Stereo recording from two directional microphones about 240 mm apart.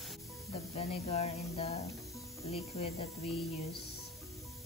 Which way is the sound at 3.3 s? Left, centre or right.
Centre.